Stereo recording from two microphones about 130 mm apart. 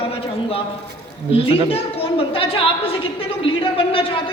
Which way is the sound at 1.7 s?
45° left (ahead or behind).